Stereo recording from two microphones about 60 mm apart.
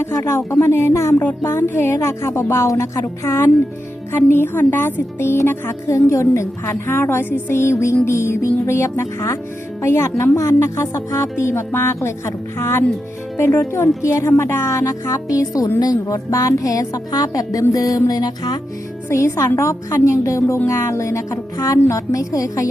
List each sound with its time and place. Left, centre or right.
0.1 s speech: left
0.6 s speech: left
1.2 s speech: left
1.5 s speech: left
14.0 s speech: left
18.1 s music: left
19.0 s speech: left